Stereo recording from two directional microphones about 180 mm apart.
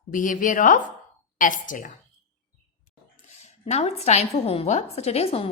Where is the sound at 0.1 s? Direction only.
45° left (ahead or behind).